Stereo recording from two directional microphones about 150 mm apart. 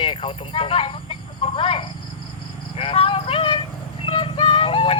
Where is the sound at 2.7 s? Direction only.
40° left (ahead or behind).